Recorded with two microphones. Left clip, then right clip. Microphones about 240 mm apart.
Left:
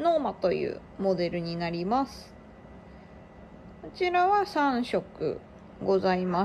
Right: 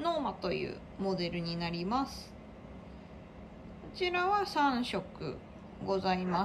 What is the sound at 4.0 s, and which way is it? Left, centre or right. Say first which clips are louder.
A woman's voice: left 7 dB; centre.